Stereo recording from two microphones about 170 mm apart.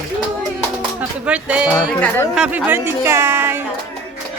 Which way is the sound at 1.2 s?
5° right (ahead or behind).